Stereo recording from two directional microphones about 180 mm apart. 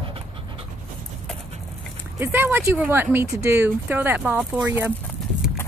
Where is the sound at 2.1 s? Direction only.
10° right (ahead or behind).